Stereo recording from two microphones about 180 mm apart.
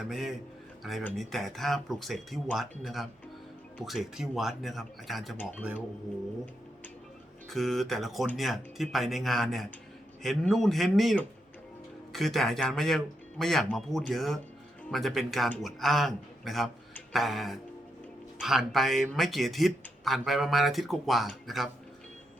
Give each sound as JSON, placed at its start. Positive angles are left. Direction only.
{"t": 0.0, "sound": "speech", "side_deg": 0}
{"t": 7.5, "sound": "speech", "side_deg": 0}